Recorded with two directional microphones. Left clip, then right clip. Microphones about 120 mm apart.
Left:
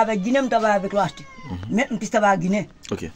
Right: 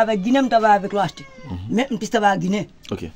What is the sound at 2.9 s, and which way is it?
Speech, 5° right (ahead or behind).